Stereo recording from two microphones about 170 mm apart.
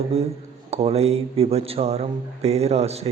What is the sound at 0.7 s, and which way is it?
Speech, 35° right (ahead or behind).